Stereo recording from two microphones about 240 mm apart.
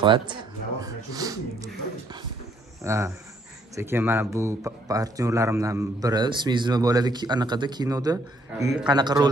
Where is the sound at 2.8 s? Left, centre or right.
Centre.